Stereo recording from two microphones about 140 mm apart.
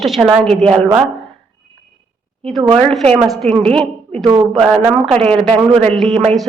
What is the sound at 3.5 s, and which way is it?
Speech, 45° right (ahead or behind).